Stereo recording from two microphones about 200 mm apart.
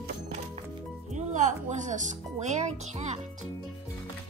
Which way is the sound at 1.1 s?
35° right (ahead or behind).